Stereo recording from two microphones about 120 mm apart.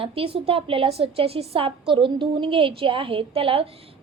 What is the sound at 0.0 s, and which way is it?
A woman's voice, 50° right (ahead or behind).